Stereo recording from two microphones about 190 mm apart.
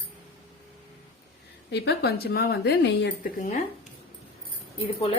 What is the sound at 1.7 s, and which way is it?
A woman's voice, 60° left (ahead or behind).